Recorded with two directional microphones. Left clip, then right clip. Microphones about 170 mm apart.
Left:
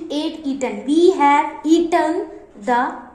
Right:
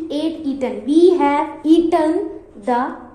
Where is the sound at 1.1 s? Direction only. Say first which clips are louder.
Left 2 dB; 20° right (ahead or behind).